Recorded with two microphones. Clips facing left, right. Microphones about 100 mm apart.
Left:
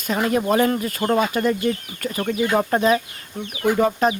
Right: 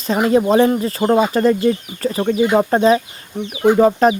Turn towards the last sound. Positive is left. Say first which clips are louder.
# right 6 dB
turn(degrees=-30)  # may be behind; listen again after turning